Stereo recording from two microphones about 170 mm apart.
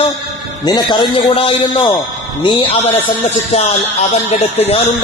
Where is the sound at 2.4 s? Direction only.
30° left (ahead or behind).